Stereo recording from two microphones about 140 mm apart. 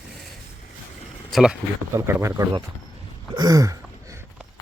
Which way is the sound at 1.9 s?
20° right (ahead or behind).